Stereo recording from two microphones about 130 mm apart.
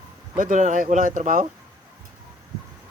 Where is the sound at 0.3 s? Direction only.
85° right.